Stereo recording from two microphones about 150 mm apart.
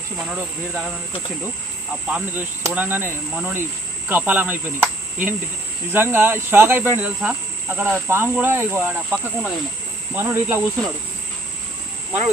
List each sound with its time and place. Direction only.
0.2 s speech: 10° right (ahead or behind)
2.1 s speech: 10° right (ahead or behind)